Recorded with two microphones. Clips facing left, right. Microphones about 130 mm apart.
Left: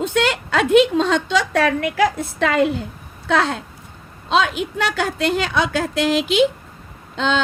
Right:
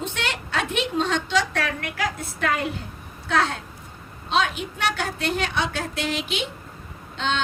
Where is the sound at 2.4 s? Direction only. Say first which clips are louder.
Left 8 dB; 90° left.